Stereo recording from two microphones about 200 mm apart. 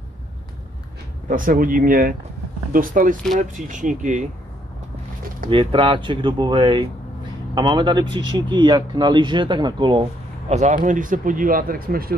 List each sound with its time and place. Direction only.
1.3 s speech: 45° right (ahead or behind)
5.5 s speech: 25° right (ahead or behind)
10.5 s speech: 35° right (ahead or behind)